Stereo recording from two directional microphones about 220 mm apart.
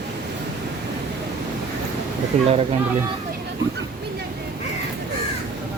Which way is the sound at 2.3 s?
30° right (ahead or behind).